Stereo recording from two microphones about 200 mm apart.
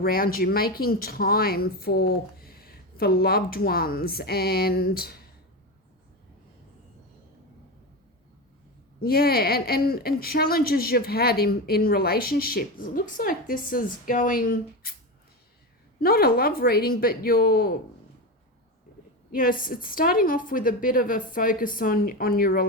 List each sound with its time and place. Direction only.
0.0 s speech: 50° left (ahead or behind)
9.0 s speech: 50° left (ahead or behind)
16.0 s speech: 50° left (ahead or behind)
19.3 s speech: 45° left (ahead or behind)